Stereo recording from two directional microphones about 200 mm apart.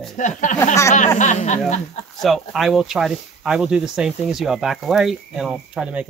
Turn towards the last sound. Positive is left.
turn(degrees=-5)  # may be behind; listen again after turning